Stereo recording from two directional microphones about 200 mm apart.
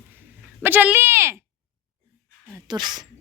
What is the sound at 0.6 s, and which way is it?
Speech, 10° right (ahead or behind).